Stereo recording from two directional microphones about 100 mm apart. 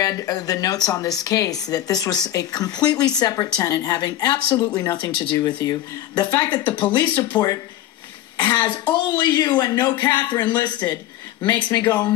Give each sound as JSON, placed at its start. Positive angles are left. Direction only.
{"t": 0.0, "sound": "speech", "side_deg": 35}